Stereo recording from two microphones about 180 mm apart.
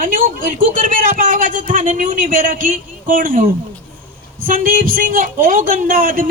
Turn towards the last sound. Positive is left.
turn(degrees=-50)  # may be behind; listen again after turning